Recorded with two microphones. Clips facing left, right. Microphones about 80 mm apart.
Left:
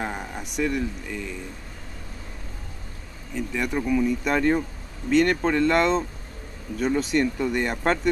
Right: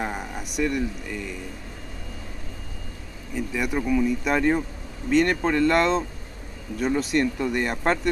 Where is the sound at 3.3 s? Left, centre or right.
Centre.